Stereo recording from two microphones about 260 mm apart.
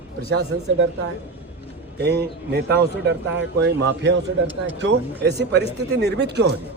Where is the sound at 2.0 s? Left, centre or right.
Right.